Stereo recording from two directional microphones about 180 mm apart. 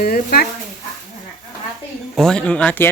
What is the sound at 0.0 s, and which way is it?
Speech, 55° left (ahead or behind).